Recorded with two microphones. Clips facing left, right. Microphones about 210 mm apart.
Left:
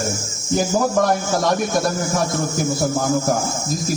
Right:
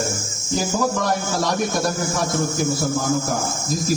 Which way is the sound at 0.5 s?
55° left (ahead or behind).